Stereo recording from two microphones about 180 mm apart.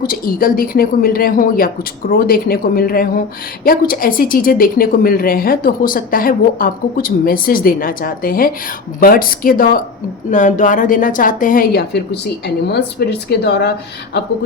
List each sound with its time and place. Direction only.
0.0 s a woman's voice: 50° left (ahead or behind); by 14.2 s 70° left (ahead or behind)